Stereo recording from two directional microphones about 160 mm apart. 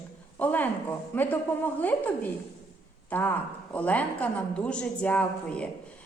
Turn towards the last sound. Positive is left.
turn(degrees=5)  # may be behind; listen again after turning